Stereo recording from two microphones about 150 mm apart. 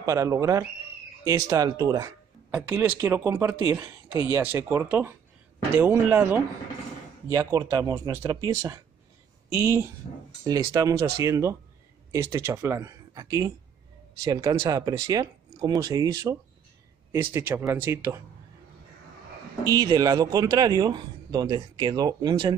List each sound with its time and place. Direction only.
0.0 s speech: 20° right (ahead or behind)
19.6 s speech: 25° right (ahead or behind)